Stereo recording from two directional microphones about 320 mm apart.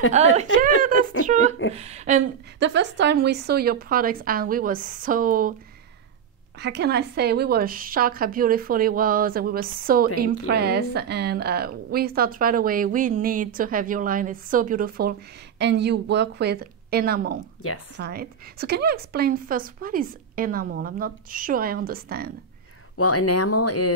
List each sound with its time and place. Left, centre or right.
0.2 s a woman's voice: right
6.6 s a woman's voice: right
17.6 s a woman's voice: left
17.9 s a woman's voice: right
22.9 s speech: left